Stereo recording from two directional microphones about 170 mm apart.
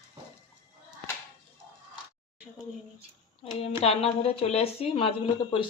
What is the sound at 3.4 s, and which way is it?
A woman's voice, 35° left (ahead or behind).